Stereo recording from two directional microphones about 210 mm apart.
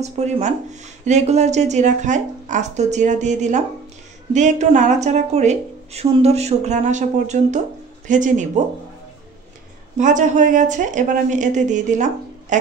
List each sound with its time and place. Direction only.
0.0 s speech: 35° right (ahead or behind)
9.9 s speech: 35° right (ahead or behind)